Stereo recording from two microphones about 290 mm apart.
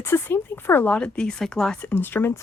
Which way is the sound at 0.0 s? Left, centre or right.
Centre.